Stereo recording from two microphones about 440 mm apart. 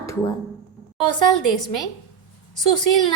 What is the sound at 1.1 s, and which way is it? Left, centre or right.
Speech, left.